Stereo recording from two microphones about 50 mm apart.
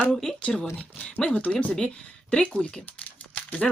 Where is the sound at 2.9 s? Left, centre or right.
Left.